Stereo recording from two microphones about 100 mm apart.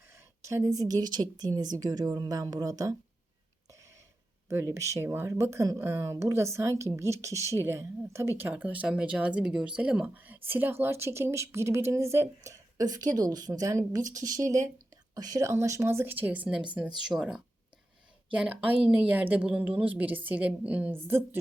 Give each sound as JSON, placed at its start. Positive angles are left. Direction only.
{"t": 0.1, "sound": "speech", "side_deg": -30}
{"t": 4.4, "sound": "a woman's voice", "side_deg": -30}
{"t": 18.3, "sound": "a woman's voice", "side_deg": -15}